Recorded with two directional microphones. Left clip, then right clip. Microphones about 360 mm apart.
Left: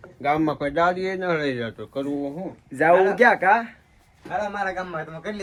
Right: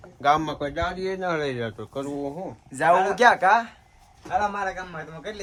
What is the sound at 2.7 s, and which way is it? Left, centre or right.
Speech, centre.